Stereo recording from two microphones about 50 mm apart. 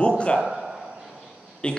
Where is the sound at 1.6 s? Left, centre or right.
Left.